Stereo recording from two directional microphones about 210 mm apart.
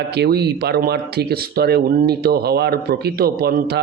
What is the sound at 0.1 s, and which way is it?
Speech, 50° right (ahead or behind).